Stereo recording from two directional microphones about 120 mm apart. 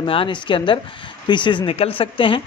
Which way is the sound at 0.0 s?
45° left (ahead or behind).